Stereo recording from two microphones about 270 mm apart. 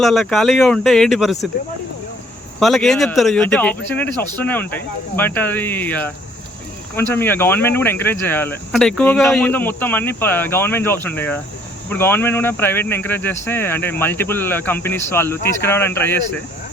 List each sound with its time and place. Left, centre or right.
0.0 s speech: centre
2.6 s speech: centre